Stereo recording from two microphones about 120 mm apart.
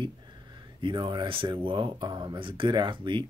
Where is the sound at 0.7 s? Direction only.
45° right (ahead or behind).